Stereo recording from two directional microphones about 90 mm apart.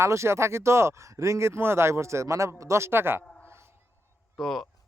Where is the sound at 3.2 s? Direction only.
15° left (ahead or behind).